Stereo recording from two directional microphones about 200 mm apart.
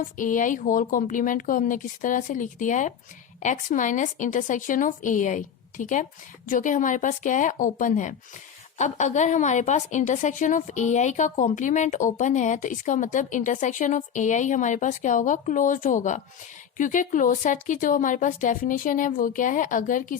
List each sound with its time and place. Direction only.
0.2 s a woman's voice: 40° left (ahead or behind)